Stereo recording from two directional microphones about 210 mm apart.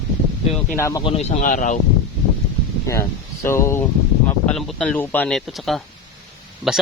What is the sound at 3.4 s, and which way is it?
Speech, 15° left (ahead or behind).